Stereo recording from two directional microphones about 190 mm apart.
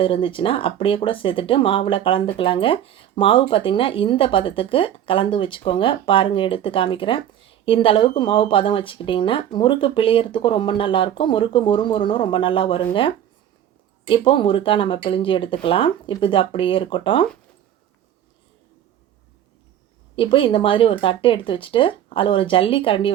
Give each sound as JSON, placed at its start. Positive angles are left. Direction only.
{"t": 0.0, "sound": "speech", "side_deg": 25}
{"t": 20.1, "sound": "speech", "side_deg": 25}